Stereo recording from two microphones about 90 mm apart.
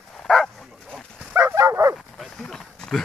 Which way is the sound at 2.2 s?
5° left (ahead or behind).